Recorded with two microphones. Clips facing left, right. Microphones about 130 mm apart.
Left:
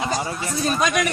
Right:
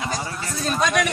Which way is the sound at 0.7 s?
5° left (ahead or behind).